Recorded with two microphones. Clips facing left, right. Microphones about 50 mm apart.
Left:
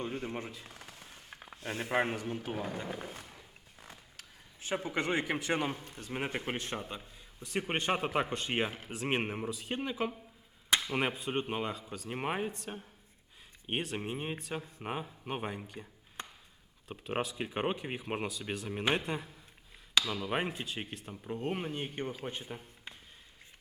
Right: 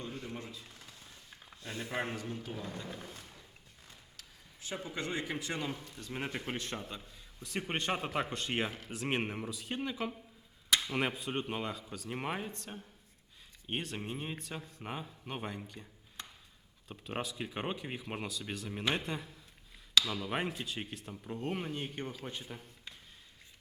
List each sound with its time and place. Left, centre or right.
0.0 s a sound: left
1.7 s speech: left
2.0 s a man's voice: left
3.8 s zipper: left
4.9 s a man's voice: left
5.8 s a man's voice: left
16.9 s a man's voice: centre